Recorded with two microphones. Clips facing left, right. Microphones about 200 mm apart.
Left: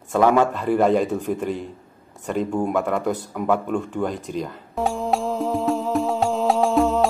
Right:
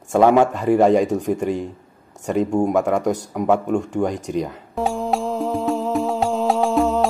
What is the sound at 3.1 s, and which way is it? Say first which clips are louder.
Speech: right 3 dB; 40° right (ahead or behind).